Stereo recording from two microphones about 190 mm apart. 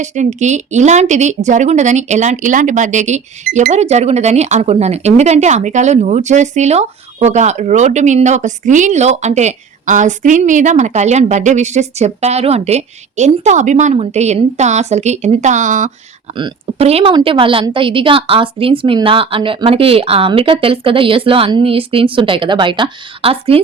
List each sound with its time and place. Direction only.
0.0 s a woman's voice: 40° right (ahead or behind)